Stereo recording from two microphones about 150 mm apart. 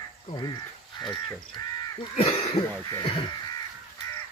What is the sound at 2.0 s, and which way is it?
Cough, 40° left (ahead or behind).